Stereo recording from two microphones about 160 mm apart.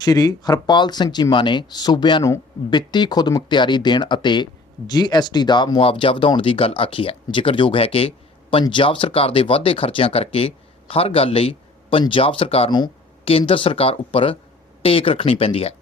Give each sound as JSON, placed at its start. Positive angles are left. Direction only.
{"t": 0.0, "sound": "speech", "side_deg": 25}